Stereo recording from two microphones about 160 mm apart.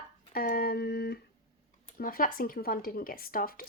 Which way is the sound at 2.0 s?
65° left (ahead or behind).